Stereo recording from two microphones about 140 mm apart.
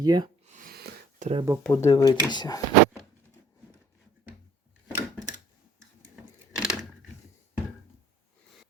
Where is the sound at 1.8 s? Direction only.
25° left (ahead or behind).